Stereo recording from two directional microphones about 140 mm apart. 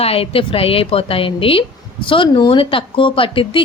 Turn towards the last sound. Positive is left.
turn(degrees=40)  # may be behind; listen again after turning